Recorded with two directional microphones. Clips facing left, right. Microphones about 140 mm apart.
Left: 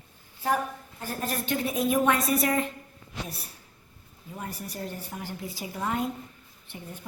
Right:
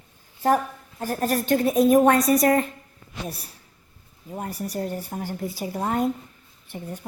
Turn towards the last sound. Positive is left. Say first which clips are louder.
# right 6 dB
turn(degrees=-40)  # may be behind; listen again after turning